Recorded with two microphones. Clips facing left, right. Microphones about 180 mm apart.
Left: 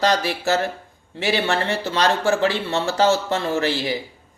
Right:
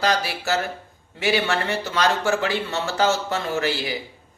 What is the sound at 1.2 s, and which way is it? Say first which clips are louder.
Speech: left 1 dB; 35° left (ahead or behind).